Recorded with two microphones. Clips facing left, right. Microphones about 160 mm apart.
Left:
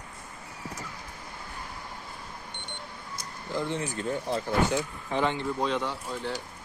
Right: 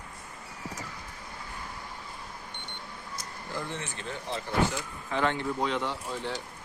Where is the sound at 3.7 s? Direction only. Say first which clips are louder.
Left 7 dB; 35° left (ahead or behind).